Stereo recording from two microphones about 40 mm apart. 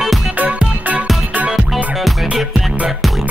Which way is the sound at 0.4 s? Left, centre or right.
Right.